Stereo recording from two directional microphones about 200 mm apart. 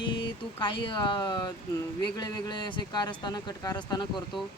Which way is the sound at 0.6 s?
25° left (ahead or behind).